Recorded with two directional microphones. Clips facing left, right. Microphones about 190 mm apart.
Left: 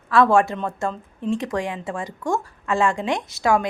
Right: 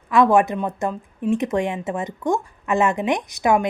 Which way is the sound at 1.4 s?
20° right (ahead or behind).